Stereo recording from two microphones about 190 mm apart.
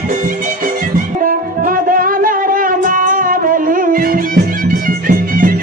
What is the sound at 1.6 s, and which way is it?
Music, 45° right (ahead or behind).